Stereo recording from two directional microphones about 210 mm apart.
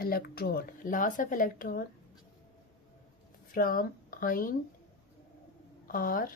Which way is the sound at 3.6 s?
40° left (ahead or behind).